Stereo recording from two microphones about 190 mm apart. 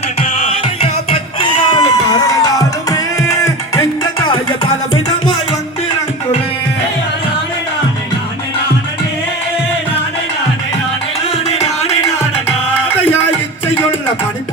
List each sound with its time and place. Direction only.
0.2 s music: 30° left (ahead or behind)
11.5 s music: 35° left (ahead or behind)